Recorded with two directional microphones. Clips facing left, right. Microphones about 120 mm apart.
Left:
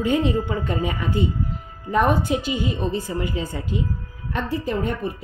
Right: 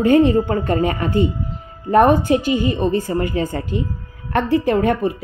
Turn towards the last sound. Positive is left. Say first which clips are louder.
# right 8 dB
turn(degrees=-80)